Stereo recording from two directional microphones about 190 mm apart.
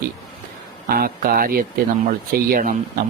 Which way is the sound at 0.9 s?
50° right (ahead or behind).